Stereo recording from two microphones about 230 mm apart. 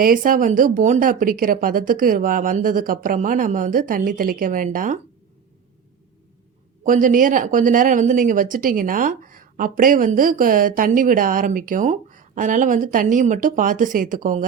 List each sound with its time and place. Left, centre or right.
0.0 s speech: right
6.8 s speech: right